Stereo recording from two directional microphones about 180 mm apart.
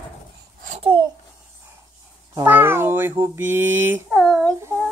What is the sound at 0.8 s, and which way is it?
Babbling, 30° right (ahead or behind).